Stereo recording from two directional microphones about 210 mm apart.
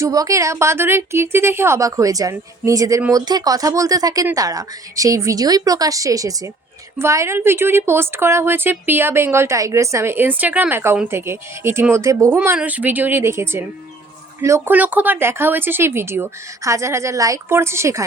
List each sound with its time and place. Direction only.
0.0 s a woman's voice: 15° right (ahead or behind)